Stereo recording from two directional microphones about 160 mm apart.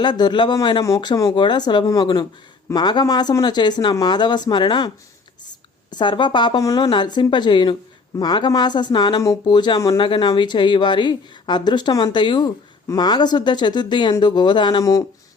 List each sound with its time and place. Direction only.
0.0 s speech: 25° left (ahead or behind)
5.9 s speech: 30° left (ahead or behind)